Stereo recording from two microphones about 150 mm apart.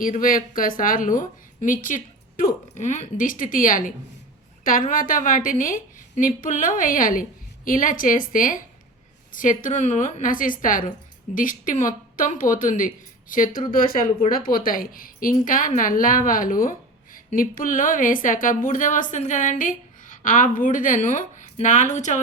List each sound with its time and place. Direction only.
0.0 s speech: 65° left (ahead or behind)